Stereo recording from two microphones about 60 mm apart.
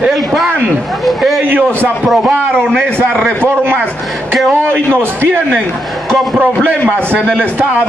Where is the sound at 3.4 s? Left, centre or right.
Right.